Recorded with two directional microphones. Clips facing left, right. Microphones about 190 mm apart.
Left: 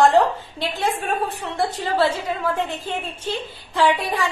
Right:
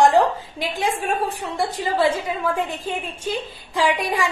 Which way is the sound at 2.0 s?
10° right (ahead or behind).